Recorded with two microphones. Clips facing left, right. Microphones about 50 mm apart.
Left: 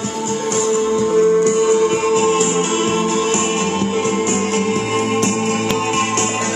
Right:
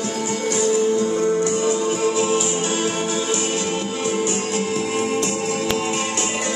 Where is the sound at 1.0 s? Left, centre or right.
Left.